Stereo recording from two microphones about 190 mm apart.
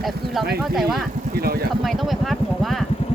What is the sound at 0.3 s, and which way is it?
Speech, centre (ahead or behind).